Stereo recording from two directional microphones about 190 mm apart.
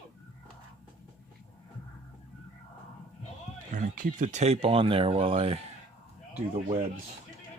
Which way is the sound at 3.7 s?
45° right (ahead or behind).